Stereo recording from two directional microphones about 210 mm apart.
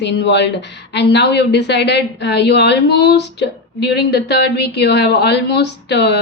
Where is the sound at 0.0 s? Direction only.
55° left (ahead or behind).